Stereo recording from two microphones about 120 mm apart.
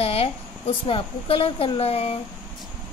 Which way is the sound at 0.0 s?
55° left (ahead or behind).